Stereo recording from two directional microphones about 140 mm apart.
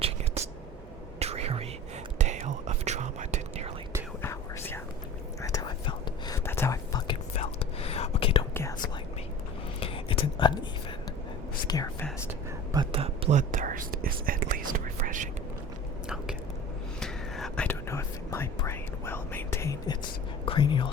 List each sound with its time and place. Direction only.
1.2 s whispering: 50° right (ahead or behind)
4.2 s whispering: 15° left (ahead or behind); by 6.4 s 30° left (ahead or behind)
6.4 s whispering: 15° left (ahead or behind)
7.3 s whispering: 45° left (ahead or behind)
9.8 s a sound: 40° left (ahead or behind)
11.7 s whispering: 30° left (ahead or behind)
12.7 s a sound: 35° right (ahead or behind)
13.3 s whispering: 65° right (ahead or behind)
17.0 s whispering: 5° left (ahead or behind)
17.7 s whispering: 20° left (ahead or behind)
20.4 s whispering: 35° left (ahead or behind)